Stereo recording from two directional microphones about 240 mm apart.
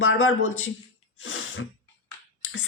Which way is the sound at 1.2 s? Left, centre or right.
Left.